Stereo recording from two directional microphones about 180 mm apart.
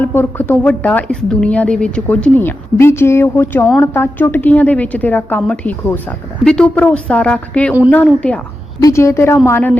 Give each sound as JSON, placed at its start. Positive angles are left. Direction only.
{"t": 0.0, "sound": "a woman's voice", "side_deg": 10}
{"t": 8.8, "sound": "a woman's voice", "side_deg": 15}